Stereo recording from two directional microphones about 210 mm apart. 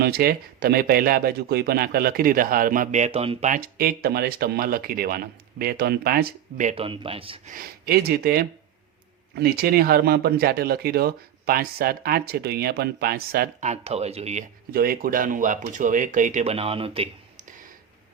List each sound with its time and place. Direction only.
0.0 s speech: 45° right (ahead or behind); by 7.5 s 25° right (ahead or behind)
7.5 s speech: 45° right (ahead or behind); by 14.4 s 30° right (ahead or behind)
14.7 s speech: 45° right (ahead or behind)